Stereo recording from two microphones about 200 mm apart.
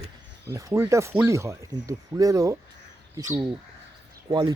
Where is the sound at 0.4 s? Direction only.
15° right (ahead or behind).